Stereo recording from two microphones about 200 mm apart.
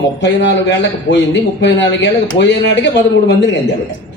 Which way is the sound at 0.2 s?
60° left (ahead or behind).